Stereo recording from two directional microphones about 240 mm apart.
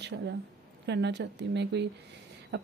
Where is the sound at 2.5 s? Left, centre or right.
Right.